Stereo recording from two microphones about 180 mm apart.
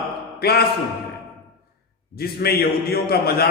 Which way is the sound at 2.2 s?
60° left (ahead or behind).